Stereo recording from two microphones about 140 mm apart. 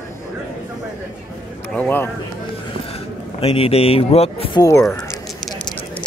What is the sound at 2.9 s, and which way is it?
Speech, 45° left (ahead or behind).